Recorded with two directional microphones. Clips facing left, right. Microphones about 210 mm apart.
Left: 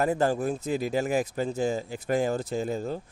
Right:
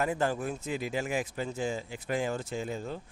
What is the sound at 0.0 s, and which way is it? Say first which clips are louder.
Speech: left 5 dB; 35° left (ahead or behind).